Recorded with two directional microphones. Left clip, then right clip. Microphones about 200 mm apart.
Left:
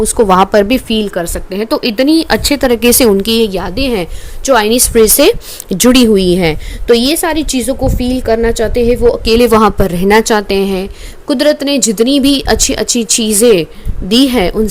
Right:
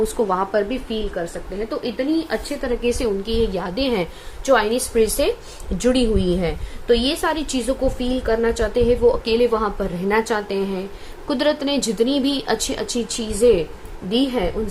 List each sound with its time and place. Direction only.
0.0 s a woman's voice: 45° left (ahead or behind)